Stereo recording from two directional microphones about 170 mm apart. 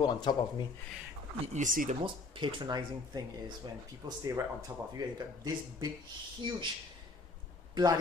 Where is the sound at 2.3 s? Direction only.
25° right (ahead or behind).